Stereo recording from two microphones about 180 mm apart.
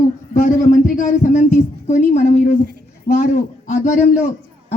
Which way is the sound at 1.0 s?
45° left (ahead or behind).